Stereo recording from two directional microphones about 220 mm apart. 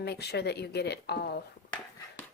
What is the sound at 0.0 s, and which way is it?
A woman's voice, 50° left (ahead or behind).